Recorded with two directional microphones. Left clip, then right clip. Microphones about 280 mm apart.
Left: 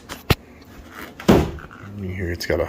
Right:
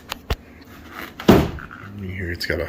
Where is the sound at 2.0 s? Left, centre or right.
Centre.